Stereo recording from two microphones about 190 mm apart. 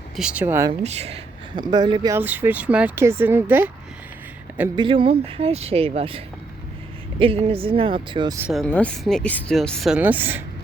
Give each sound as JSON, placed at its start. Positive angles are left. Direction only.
{"t": 0.2, "sound": "speech", "side_deg": -5}
{"t": 0.7, "sound": "speech", "side_deg": -35}
{"t": 2.1, "sound": "speech", "side_deg": -10}
{"t": 4.8, "sound": "speech", "side_deg": -25}
{"t": 8.4, "sound": "speech", "side_deg": -5}
{"t": 8.6, "sound": "speech", "side_deg": 5}